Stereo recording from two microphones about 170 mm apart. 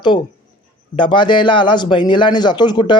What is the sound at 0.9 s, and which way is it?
Speech, 30° left (ahead or behind).